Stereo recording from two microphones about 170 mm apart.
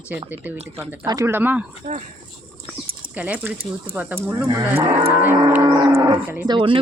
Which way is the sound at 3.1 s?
10° right (ahead or behind).